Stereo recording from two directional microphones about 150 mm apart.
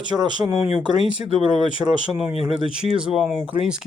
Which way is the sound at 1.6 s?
5° right (ahead or behind).